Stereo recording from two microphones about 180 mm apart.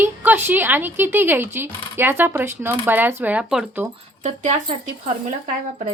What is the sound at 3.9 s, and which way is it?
Speech, 40° right (ahead or behind).